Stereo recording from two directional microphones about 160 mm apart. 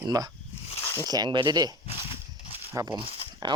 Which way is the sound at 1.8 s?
35° left (ahead or behind).